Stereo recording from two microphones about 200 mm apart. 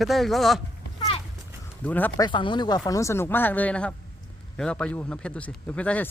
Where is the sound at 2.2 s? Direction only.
25° left (ahead or behind).